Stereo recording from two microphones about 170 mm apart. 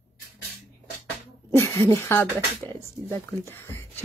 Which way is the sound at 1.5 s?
15° left (ahead or behind).